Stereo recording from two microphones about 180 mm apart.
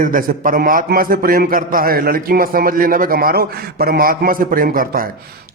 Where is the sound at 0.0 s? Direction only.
50° right (ahead or behind).